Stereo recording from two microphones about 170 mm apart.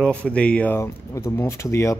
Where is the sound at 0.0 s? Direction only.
5° left (ahead or behind).